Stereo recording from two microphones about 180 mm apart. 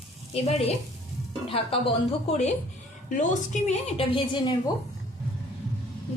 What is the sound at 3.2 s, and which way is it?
A woman's voice, 40° left (ahead or behind).